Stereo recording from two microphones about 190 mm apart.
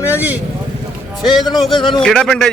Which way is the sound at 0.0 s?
10° right (ahead or behind).